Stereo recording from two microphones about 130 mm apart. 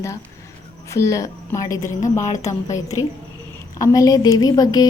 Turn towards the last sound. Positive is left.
turn(degrees=30)  # may be behind; listen again after turning